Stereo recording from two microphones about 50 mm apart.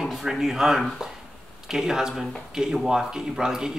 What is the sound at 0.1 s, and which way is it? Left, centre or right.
Speech, centre.